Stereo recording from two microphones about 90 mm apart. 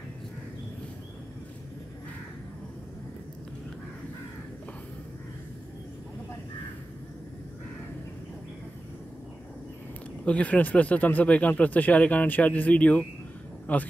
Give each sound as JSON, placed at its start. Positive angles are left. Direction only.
{"t": 10.2, "sound": "speech", "side_deg": 15}